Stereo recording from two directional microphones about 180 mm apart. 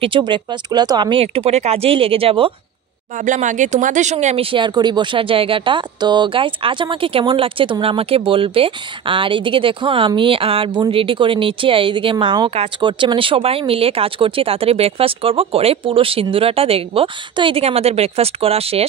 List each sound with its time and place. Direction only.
0.0 s speech: 25° right (ahead or behind)
3.2 s speech: 45° right (ahead or behind)